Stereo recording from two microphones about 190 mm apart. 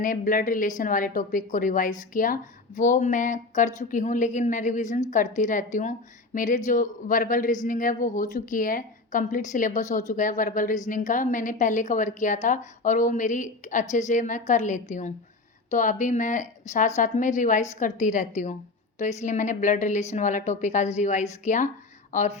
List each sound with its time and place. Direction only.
0.0 s a woman's voice: 45° left (ahead or behind)